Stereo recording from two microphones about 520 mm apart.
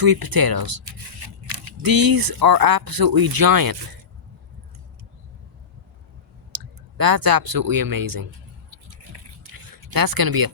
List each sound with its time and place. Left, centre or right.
0.0 s speech: right
1.8 s speech: right
6.5 s speech: right
8.7 s drip: right